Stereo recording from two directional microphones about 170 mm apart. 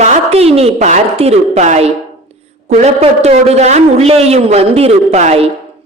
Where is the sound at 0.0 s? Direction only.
40° right (ahead or behind).